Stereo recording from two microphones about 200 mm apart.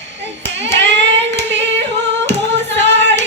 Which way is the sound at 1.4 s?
60° right (ahead or behind).